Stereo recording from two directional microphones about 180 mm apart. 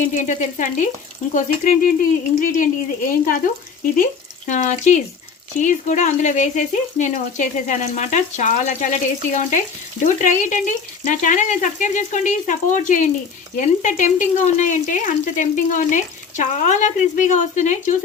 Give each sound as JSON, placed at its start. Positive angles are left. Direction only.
{"t": 0.0, "sound": "speech", "side_deg": 45}